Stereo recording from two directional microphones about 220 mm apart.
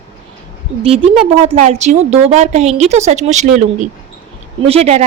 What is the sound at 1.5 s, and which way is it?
A woman's voice, 30° right (ahead or behind).